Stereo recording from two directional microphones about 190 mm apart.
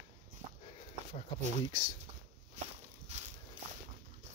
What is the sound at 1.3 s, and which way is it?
Speech, 20° left (ahead or behind).